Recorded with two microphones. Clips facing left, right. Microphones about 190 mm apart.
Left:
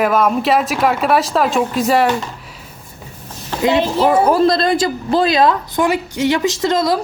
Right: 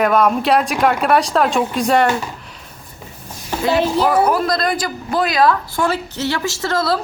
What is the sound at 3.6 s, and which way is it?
A woman's voice, 20° left (ahead or behind).